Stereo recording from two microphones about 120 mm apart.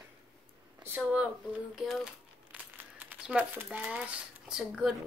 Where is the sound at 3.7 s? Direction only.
10° right (ahead or behind).